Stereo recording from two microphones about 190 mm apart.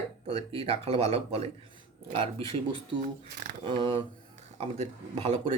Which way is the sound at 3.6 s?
25° right (ahead or behind).